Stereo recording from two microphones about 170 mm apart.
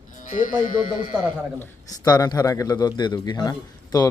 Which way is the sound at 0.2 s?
50° left (ahead or behind).